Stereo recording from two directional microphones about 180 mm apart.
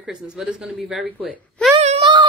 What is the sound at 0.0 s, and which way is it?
Speech, 5° right (ahead or behind).